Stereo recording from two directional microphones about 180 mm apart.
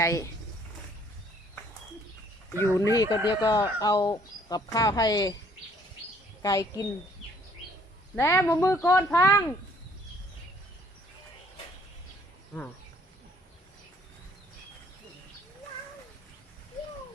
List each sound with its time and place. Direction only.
0.0 s speech: 15° left (ahead or behind)
2.6 s speech: 15° left (ahead or behind)
6.4 s speech: 20° left (ahead or behind)
8.1 s speech: 10° left (ahead or behind)